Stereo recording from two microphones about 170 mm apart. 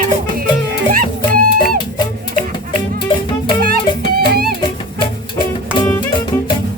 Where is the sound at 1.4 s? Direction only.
55° right (ahead or behind).